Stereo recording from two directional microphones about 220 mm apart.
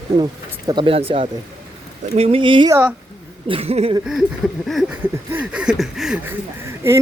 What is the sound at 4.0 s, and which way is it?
Speech, centre (ahead or behind).